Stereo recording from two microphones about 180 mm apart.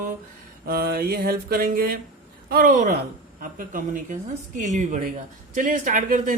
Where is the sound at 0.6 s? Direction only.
55° right (ahead or behind).